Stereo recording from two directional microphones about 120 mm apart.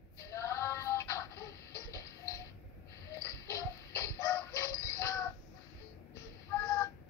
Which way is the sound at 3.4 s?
25° left (ahead or behind).